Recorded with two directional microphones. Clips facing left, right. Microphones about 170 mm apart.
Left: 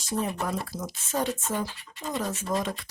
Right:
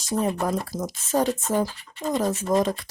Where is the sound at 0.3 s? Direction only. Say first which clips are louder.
Right 5 dB; 45° right (ahead or behind).